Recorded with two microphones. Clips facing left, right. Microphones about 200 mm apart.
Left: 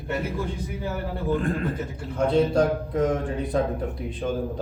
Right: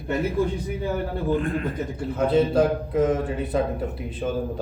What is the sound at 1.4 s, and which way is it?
Speech, 35° left (ahead or behind).